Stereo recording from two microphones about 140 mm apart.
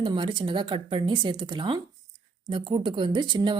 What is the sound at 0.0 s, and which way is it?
Speech, 35° right (ahead or behind).